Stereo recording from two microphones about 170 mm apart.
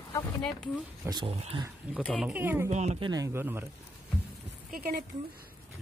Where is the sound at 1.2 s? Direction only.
35° right (ahead or behind).